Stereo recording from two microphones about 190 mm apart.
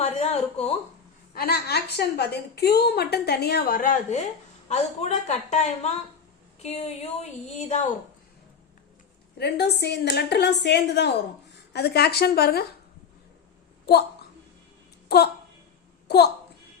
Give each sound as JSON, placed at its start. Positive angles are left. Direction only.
{"t": 0.0, "sound": "a sound", "side_deg": 35}
{"t": 1.3, "sound": "a woman's voice", "side_deg": 55}
{"t": 9.4, "sound": "a woman's voice", "side_deg": 60}
{"t": 13.9, "sound": "a woman's voice", "side_deg": 60}
{"t": 15.1, "sound": "a woman's voice", "side_deg": 60}